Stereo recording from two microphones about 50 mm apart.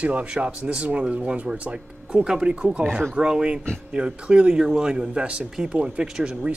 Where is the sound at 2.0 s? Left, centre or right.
Centre.